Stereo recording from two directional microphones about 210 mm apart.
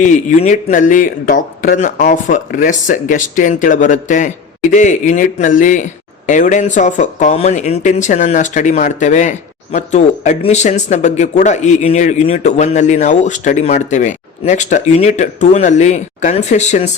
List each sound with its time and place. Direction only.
0.0 s speech: 35° left (ahead or behind)